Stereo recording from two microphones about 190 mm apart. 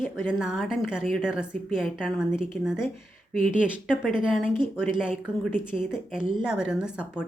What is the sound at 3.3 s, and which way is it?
Speech, 45° left (ahead or behind).